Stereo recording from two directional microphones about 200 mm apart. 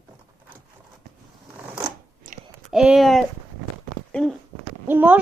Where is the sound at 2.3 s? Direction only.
40° right (ahead or behind).